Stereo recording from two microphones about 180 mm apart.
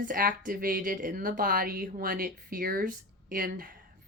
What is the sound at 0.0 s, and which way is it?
Speech, 55° right (ahead or behind).